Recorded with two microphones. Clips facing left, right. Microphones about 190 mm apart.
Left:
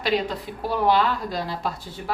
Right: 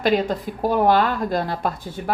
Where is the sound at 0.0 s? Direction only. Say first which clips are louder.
Right 5 dB; 45° right (ahead or behind).